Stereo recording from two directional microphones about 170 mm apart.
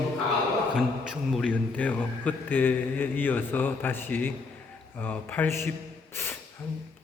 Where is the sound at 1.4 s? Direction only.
10° left (ahead or behind).